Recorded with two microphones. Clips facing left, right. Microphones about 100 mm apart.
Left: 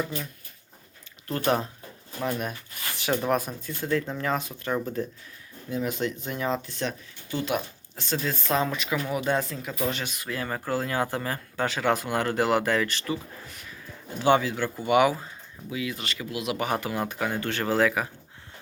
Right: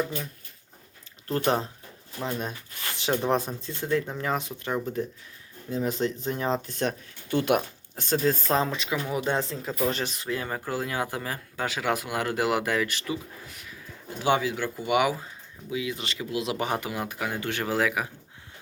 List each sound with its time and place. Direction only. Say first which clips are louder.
1.5 s speech: left 2 dB; 25° right (ahead or behind)
5.7 s speech: right 1 dB; 35° right (ahead or behind)
8.7 s speech: left 1 dB; 20° right (ahead or behind)
10.2 s speech: left 3 dB; 15° right (ahead or behind)
15.7 s speech: right 1 dB; 20° right (ahead or behind)
17.0 s speech: left 2 dB; 5° right (ahead or behind)